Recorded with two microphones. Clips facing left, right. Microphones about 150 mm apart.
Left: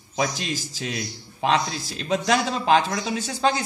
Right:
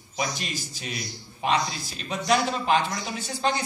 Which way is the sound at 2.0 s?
90° left.